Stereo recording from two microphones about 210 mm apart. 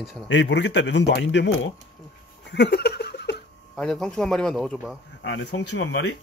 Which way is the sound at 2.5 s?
55° left (ahead or behind).